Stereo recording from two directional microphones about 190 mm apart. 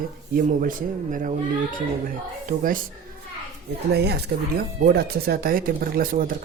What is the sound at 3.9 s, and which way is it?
Speech, 60° right (ahead or behind).